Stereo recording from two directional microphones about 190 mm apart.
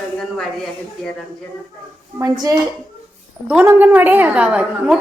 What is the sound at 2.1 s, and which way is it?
A woman's voice, 20° right (ahead or behind).